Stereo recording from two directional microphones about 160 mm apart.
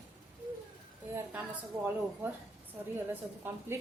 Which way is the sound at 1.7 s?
15° right (ahead or behind).